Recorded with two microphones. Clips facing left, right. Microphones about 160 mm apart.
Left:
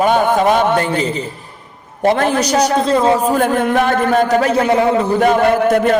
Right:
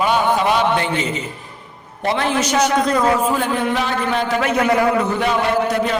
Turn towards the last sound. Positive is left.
turn(degrees=50)  # may be behind; listen again after turning